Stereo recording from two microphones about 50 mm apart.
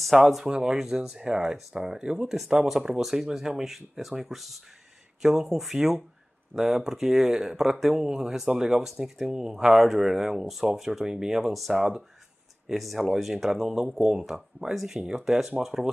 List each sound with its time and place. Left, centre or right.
0.0 s speech: centre
0.5 s speech: centre